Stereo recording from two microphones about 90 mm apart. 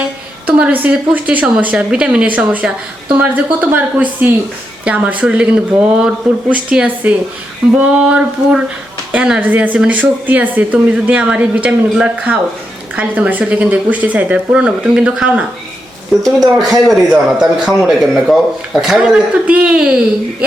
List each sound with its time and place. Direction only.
0.4 s speech: 15° right (ahead or behind)
16.6 s a man's voice: centre (ahead or behind)